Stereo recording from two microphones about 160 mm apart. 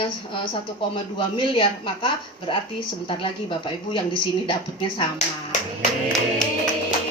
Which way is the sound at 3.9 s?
35° left (ahead or behind).